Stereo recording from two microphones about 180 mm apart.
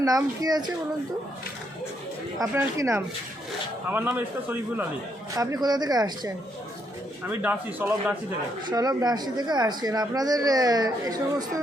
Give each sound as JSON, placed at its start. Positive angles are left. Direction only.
{"t": 0.4, "sound": "speech", "side_deg": -20}
{"t": 2.4, "sound": "a man's voice", "side_deg": -15}
{"t": 5.4, "sound": "speech", "side_deg": -20}
{"t": 7.3, "sound": "a man's voice", "side_deg": -10}
{"t": 8.6, "sound": "speech", "side_deg": -20}